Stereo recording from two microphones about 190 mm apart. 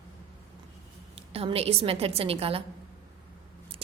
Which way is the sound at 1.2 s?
30° right (ahead or behind).